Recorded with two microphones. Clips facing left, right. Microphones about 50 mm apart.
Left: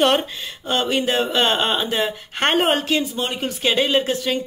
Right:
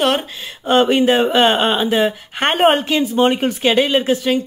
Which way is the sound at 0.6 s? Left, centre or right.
Right.